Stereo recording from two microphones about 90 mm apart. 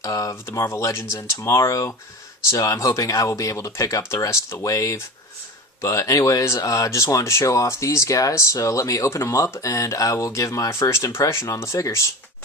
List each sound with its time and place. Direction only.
0.0 s speech: 40° left (ahead or behind)